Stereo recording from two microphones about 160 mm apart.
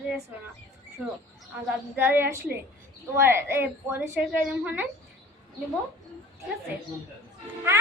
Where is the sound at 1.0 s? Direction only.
5° right (ahead or behind).